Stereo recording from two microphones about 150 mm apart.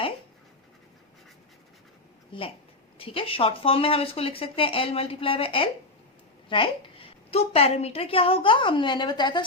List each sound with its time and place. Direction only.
2.3 s a woman's voice: 35° left (ahead or behind)